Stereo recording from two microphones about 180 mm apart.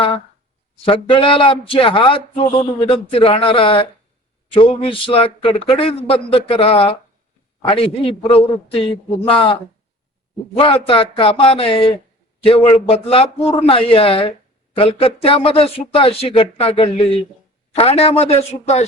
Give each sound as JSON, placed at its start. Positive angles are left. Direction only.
{"t": 0.9, "sound": "speech", "side_deg": 30}
{"t": 10.6, "sound": "speech", "side_deg": 30}